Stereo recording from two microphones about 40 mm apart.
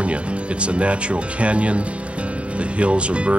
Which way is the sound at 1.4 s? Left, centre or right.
Right.